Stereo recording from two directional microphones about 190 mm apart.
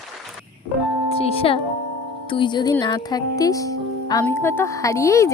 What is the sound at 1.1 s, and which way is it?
Speech, 30° left (ahead or behind).